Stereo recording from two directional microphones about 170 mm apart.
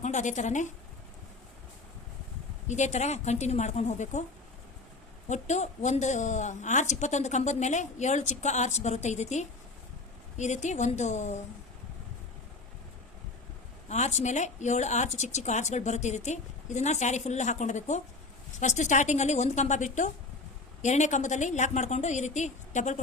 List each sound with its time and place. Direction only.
0.0 s a woman's voice: 45° left (ahead or behind)
2.6 s a woman's voice: 45° left (ahead or behind)
5.3 s a woman's voice: 45° left (ahead or behind)
13.8 s a woman's voice: 45° left (ahead or behind)